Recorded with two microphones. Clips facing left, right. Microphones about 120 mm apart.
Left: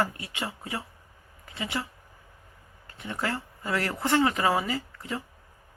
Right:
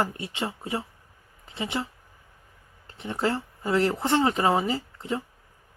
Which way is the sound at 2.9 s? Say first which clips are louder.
Right 5 dB; 25° right (ahead or behind).